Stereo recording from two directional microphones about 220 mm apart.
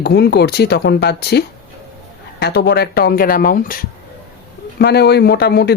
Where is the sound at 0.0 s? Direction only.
50° left (ahead or behind).